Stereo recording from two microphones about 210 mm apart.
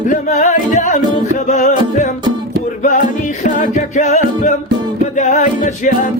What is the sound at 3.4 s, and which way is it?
Music, 35° left (ahead or behind).